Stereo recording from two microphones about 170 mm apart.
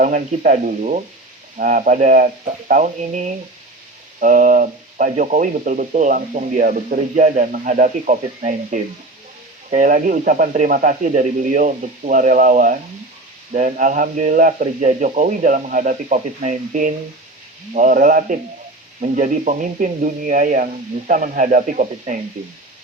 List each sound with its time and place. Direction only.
0.0 s speech: 50° right (ahead or behind)